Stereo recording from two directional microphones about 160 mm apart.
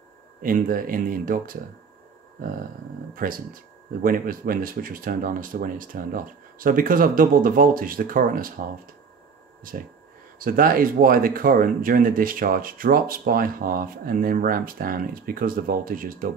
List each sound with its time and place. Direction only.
0.4 s speech: 60° right (ahead or behind)
3.2 s speech: 60° right (ahead or behind)
10.4 s speech: 65° right (ahead or behind)